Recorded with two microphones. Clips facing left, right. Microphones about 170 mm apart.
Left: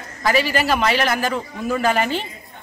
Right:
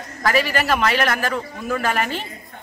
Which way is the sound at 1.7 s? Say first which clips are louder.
Left 3 dB; 30° left (ahead or behind).